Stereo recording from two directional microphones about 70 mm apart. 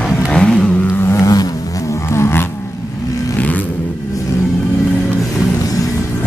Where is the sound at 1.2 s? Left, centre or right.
Left.